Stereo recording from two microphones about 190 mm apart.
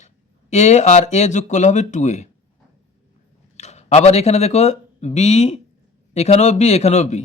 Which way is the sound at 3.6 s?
35° left (ahead or behind).